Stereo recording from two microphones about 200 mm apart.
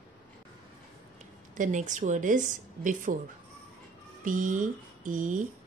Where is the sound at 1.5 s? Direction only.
40° right (ahead or behind).